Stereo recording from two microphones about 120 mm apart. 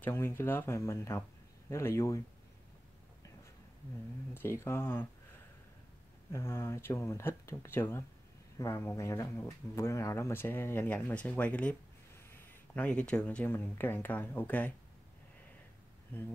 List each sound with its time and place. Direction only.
0.0 s speech: 20° left (ahead or behind)
4.3 s speech: 20° left (ahead or behind)
6.3 s speech: 20° left (ahead or behind)
16.1 s speech: 15° left (ahead or behind)